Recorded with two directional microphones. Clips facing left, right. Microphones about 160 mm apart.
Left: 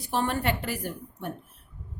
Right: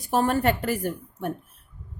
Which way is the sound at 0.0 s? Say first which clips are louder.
Right 5 dB; 45° right (ahead or behind).